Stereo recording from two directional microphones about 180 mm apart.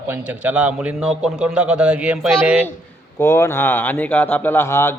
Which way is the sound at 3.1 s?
15° left (ahead or behind).